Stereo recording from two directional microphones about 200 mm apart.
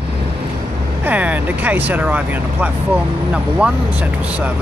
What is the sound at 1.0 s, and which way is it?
Speech, 5° right (ahead or behind).